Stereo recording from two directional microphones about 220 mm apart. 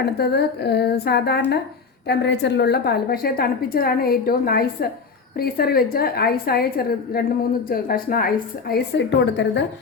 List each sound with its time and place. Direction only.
0.0 s a woman's voice: 50° left (ahead or behind)